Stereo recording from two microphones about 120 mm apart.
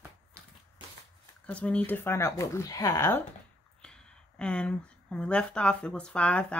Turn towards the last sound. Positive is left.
turn(degrees=10)  # may be behind; listen again after turning